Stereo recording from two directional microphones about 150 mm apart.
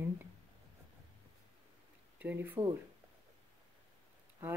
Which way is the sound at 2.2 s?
10° right (ahead or behind).